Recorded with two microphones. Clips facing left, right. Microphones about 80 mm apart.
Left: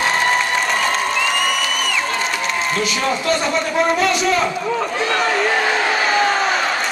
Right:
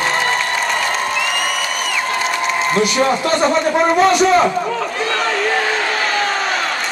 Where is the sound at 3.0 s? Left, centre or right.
Right.